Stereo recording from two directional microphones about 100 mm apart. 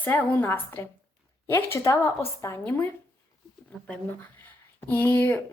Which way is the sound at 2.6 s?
20° left (ahead or behind).